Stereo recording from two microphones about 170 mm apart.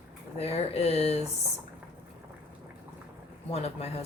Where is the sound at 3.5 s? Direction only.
35° left (ahead or behind).